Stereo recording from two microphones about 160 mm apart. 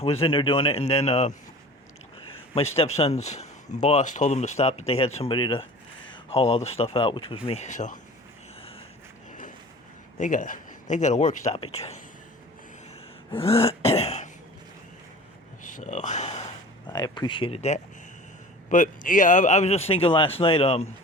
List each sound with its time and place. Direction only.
0.0 s a man's voice: 40° left (ahead or behind)
2.6 s a man's voice: 40° left (ahead or behind)
10.2 s a man's voice: 55° left (ahead or behind)
13.3 s a man's voice: 35° left (ahead or behind)
15.8 s speech: 50° left (ahead or behind)
16.9 s a man's voice: 25° left (ahead or behind)
18.7 s a man's voice: 55° left (ahead or behind); by 20.8 s 35° left (ahead or behind)